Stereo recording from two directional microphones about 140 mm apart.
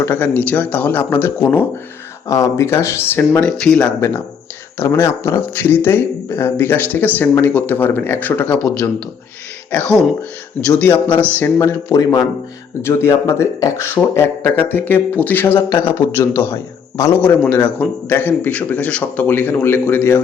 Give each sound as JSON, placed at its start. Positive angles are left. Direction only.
{"t": 0.0, "sound": "speech", "side_deg": 15}
{"t": 4.8, "sound": "speech", "side_deg": 20}
{"t": 9.7, "sound": "speech", "side_deg": 10}